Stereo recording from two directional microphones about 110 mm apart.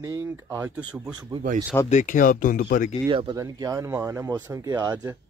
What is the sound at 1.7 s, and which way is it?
Speech, 25° left (ahead or behind).